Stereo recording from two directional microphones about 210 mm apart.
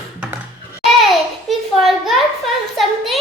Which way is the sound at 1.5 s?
Centre (ahead or behind).